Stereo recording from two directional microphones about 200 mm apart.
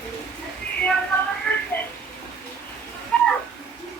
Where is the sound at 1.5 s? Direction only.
5° left (ahead or behind).